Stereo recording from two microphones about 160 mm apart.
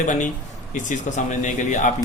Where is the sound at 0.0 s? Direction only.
50° left (ahead or behind).